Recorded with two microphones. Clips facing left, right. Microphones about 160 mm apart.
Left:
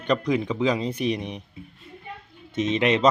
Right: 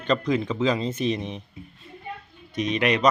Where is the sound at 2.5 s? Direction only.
25° left (ahead or behind).